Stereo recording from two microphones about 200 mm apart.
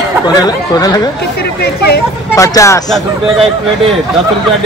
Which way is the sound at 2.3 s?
15° left (ahead or behind).